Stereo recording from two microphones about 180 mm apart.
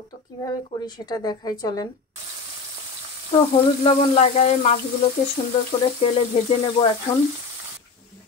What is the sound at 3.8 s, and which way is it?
Speech, 30° left (ahead or behind).